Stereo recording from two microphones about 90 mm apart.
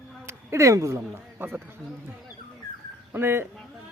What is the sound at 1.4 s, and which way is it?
Speech, 25° right (ahead or behind).